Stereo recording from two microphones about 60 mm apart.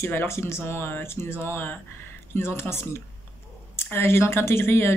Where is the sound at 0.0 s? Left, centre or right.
Left.